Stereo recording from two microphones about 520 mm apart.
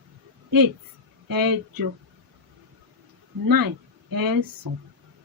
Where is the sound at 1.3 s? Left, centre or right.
Right.